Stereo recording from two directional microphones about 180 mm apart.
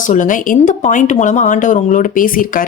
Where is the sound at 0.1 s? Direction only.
45° left (ahead or behind).